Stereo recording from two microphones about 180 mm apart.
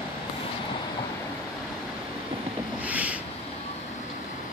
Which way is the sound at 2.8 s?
10° right (ahead or behind).